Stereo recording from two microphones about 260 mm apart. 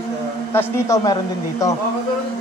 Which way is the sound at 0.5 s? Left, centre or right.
Centre.